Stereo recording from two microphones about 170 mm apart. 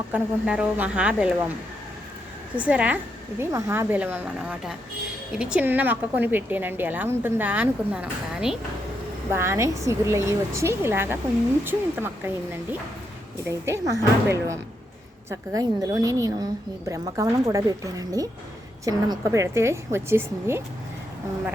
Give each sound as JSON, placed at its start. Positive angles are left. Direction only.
{"t": 0.1, "sound": "a woman's voice", "side_deg": -10}
{"t": 2.6, "sound": "a woman's voice", "side_deg": -10}
{"t": 13.5, "sound": "a woman's voice", "side_deg": -15}